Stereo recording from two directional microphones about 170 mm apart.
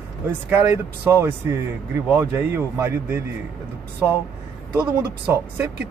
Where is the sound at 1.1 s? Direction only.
15° right (ahead or behind).